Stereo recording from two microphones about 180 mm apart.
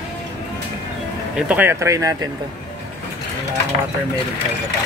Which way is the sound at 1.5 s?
10° right (ahead or behind).